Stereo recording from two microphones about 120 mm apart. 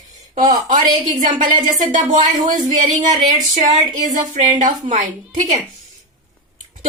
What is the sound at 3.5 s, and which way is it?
A woman's voice, 90° right.